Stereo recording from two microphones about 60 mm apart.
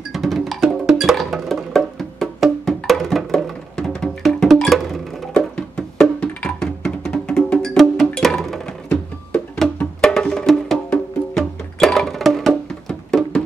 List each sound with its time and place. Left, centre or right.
0.1 s music: centre
6.6 s music: centre
7.5 s music: centre